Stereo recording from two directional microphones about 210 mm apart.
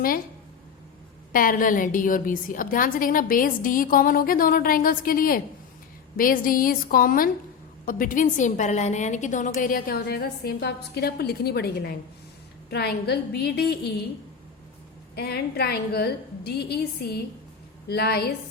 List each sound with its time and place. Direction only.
1.3 s a woman's voice: 40° left (ahead or behind)
15.1 s a woman's voice: 50° left (ahead or behind)